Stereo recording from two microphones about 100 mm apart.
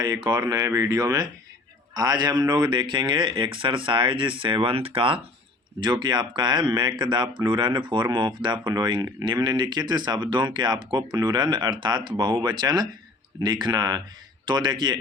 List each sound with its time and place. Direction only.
0.0 s speech: 45° right (ahead or behind); by 5.2 s 65° right (ahead or behind)
5.8 s speech: 50° right (ahead or behind)